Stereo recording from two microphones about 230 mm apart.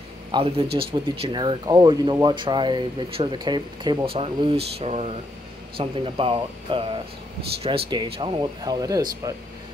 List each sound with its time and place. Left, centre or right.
0.3 s speech: right